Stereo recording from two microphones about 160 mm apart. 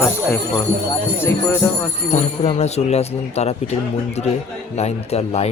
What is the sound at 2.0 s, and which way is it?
Speech, 45° left (ahead or behind).